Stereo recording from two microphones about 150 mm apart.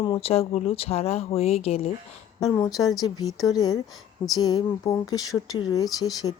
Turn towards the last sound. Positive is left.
turn(degrees=25)  # may be behind; listen again after turning